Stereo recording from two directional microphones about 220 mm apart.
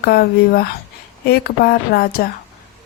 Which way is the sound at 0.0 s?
45° left (ahead or behind).